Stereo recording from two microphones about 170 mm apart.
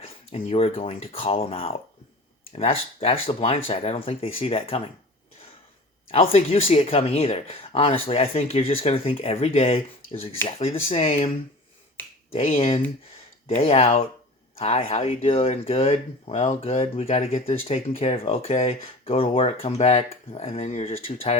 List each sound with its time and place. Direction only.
0.0 s speech: 35° left (ahead or behind)
6.1 s speech: 35° left (ahead or behind)
12.3 s speech: 35° left (ahead or behind)